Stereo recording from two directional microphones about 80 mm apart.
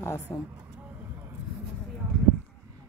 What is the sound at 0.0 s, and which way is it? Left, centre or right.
Speech, left.